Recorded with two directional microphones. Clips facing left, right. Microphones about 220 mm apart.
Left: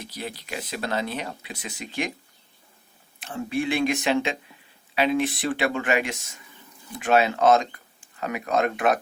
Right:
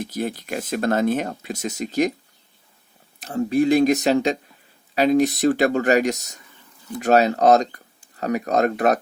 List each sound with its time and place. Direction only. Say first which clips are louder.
0.0 s speech: right 9 dB; 45° right (ahead or behind)
3.2 s speech: right 8 dB; 40° right (ahead or behind)